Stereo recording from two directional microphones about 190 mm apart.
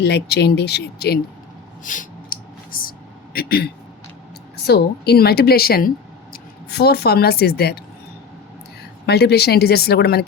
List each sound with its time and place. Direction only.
0.0 s a woman's voice: 60° left (ahead or behind)
1.8 s a sound: 45° left (ahead or behind)
3.3 s a woman's voice: 55° left (ahead or behind)
9.0 s a woman's voice: 60° left (ahead or behind)